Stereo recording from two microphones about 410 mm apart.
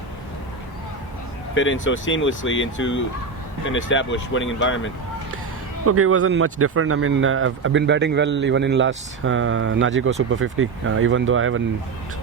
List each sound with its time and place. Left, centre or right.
1.5 s speech: left
5.8 s speech: right